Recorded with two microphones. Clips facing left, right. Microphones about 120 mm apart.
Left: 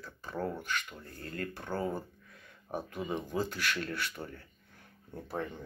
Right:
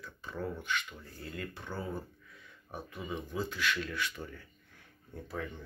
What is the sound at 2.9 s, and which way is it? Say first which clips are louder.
Speech: left 3 dB; 65° left (ahead or behind).